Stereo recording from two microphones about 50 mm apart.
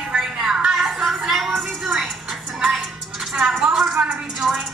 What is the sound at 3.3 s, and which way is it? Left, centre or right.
A woman's voice, centre.